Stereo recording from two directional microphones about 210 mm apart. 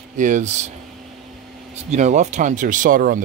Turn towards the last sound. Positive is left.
turn(degrees=-40)  # may be behind; listen again after turning